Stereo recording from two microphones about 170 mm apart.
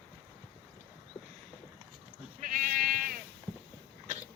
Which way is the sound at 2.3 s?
55° right (ahead or behind).